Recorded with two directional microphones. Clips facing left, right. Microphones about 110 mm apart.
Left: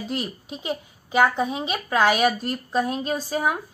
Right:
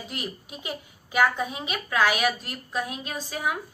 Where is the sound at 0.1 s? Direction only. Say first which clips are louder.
Left 5 dB; 30° left (ahead or behind).